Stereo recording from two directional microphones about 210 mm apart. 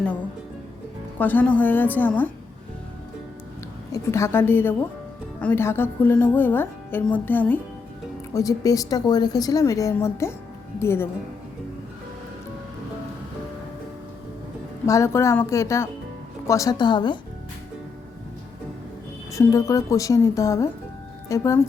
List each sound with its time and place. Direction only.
1.2 s a woman's voice: 10° left (ahead or behind)
3.9 s a woman's voice: 15° left (ahead or behind)
14.8 s a woman's voice: 15° left (ahead or behind)
19.3 s a woman's voice: 15° left (ahead or behind)